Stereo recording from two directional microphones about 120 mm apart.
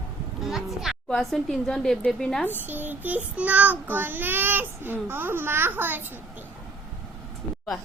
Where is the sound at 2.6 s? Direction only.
15° right (ahead or behind).